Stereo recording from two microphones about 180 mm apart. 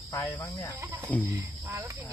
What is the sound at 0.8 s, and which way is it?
Speech, 15° right (ahead or behind).